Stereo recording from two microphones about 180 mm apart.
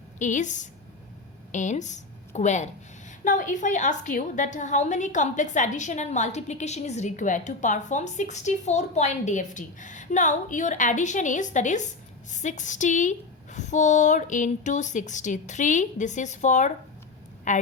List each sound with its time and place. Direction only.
0.2 s a woman's voice: 45° left (ahead or behind)